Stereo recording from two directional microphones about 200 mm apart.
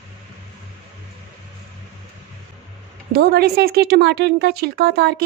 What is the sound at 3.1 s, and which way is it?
Speech, 55° right (ahead or behind).